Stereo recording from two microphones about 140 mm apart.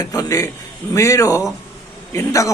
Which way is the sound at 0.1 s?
25° left (ahead or behind).